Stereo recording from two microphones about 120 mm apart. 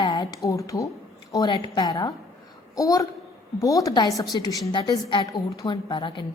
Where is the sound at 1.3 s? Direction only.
35° left (ahead or behind).